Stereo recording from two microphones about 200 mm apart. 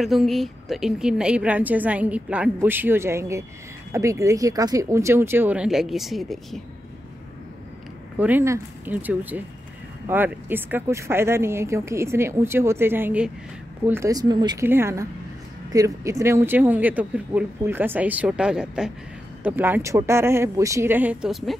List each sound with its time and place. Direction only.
0.0 s a woman's voice: centre (ahead or behind)
8.2 s a woman's voice: 10° right (ahead or behind)